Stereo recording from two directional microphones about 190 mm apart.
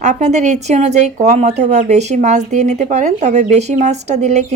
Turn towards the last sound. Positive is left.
turn(degrees=-40)  # may be behind; listen again after turning